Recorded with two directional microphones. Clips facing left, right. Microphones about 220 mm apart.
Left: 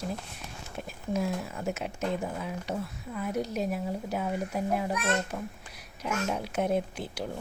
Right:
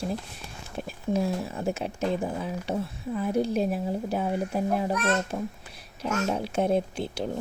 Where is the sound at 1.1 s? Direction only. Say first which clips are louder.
Right 3 dB; 30° right (ahead or behind).